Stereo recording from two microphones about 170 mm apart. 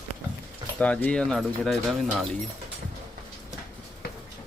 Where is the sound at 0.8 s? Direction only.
10° left (ahead or behind).